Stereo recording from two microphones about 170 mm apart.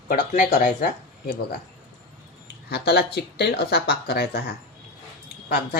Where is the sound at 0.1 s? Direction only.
50° left (ahead or behind).